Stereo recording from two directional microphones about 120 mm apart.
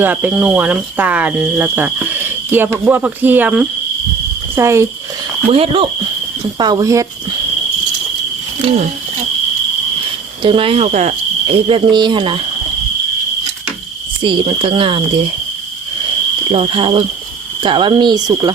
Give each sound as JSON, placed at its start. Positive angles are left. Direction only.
{"t": 0.0, "sound": "speech", "side_deg": -15}
{"t": 4.5, "sound": "speech", "side_deg": -25}
{"t": 5.5, "sound": "speech", "side_deg": -55}
{"t": 6.6, "sound": "speech", "side_deg": -35}
{"t": 8.6, "sound": "speech", "side_deg": -60}
{"t": 10.4, "sound": "speech", "side_deg": -50}
{"t": 10.9, "sound": "speech", "side_deg": -60}
{"t": 14.2, "sound": "speech", "side_deg": -45}
{"t": 16.5, "sound": "speech", "side_deg": -50}